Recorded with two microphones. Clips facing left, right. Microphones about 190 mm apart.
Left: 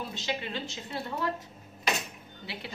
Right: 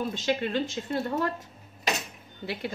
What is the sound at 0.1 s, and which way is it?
Speech, 50° right (ahead or behind).